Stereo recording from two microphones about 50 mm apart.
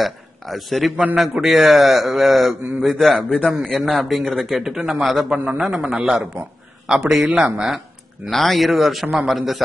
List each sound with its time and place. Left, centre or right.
0.0 s a man's voice: centre
3.2 s a man's voice: left
3.7 s a man's voice: centre
7.2 s a man's voice: right
8.3 s a man's voice: centre